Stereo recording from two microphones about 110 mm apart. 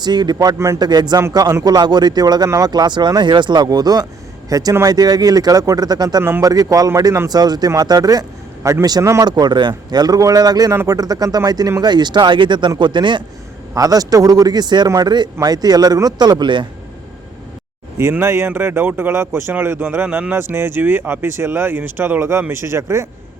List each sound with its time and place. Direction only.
0.0 s a man's voice: 40° right (ahead or behind)
9.2 s a man's voice: 40° right (ahead or behind)
13.7 s a man's voice: 35° right (ahead or behind)
17.9 s speech: 20° right (ahead or behind)